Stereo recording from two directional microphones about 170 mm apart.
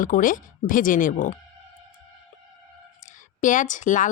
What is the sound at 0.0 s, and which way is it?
Speech, 55° left (ahead or behind).